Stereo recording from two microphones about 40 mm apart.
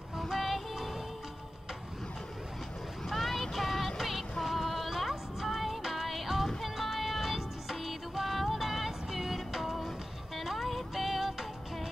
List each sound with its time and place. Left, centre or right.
0.2 s music: centre
3.1 s music: centre